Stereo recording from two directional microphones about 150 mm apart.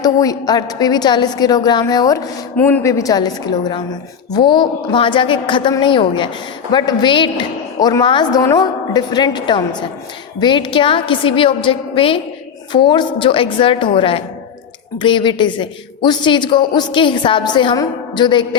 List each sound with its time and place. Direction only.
0.0 s a woman's voice: 25° left (ahead or behind)